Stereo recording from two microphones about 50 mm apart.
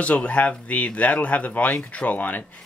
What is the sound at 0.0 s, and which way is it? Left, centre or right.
Speech, left.